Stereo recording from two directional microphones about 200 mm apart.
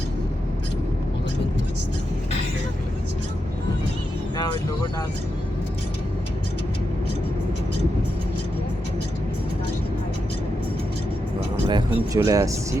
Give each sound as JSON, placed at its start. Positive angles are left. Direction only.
{"t": 11.7, "sound": "speech", "side_deg": -15}